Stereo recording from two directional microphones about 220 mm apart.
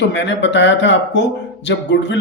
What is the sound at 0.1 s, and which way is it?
A man's voice, 55° left (ahead or behind).